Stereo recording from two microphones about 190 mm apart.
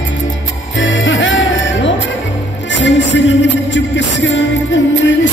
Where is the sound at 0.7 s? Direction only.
85° left.